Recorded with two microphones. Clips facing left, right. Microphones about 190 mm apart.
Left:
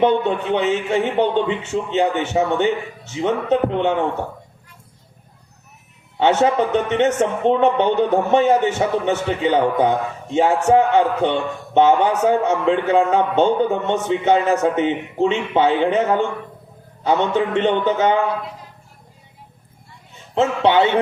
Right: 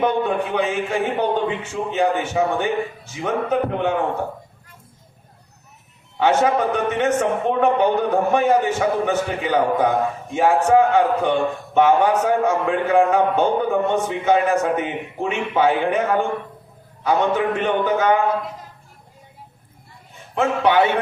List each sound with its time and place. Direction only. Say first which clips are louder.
0.0 s a man's voice: left 3 dB; 25° left (ahead or behind)
6.1 s a man's voice: left 1 dB; 25° left (ahead or behind)
20.3 s a man's voice: left 2 dB; 25° left (ahead or behind)